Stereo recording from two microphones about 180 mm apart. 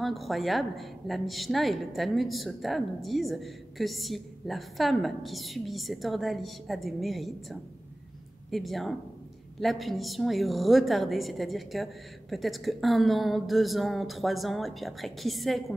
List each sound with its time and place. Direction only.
0.0 s a woman's voice: centre (ahead or behind)